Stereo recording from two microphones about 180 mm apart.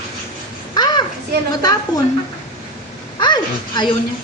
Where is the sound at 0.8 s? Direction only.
25° left (ahead or behind).